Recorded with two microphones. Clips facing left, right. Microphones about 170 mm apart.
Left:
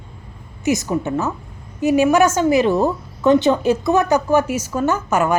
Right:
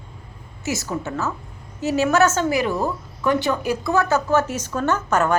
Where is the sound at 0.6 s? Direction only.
15° left (ahead or behind).